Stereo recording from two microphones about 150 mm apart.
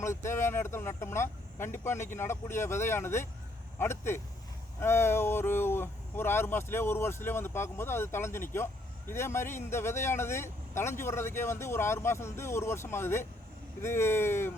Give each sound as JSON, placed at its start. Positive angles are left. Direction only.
{"t": 0.0, "sound": "speech", "side_deg": 20}